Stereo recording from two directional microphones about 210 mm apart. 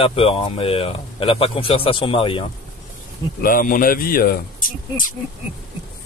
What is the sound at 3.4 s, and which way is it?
Speech, 40° left (ahead or behind).